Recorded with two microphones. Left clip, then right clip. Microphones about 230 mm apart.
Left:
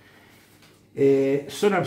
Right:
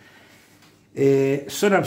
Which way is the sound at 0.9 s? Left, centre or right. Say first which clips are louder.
Right 1 dB; right.